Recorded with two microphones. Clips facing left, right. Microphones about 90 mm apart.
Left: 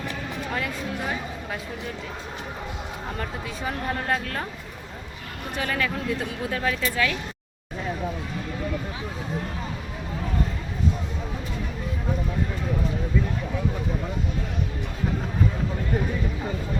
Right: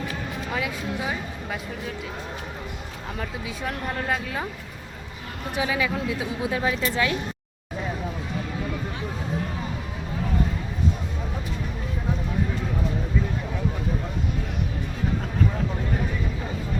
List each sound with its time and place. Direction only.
0.5 s speech: 5° right (ahead or behind)
3.2 s speech: centre (ahead or behind)
5.5 s speech: 10° right (ahead or behind)
6.4 s speech: 15° right (ahead or behind)